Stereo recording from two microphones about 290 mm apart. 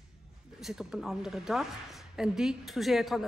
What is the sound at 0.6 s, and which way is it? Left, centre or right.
A woman's voice, centre.